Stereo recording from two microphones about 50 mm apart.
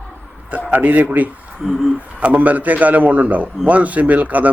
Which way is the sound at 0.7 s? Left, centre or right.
Right.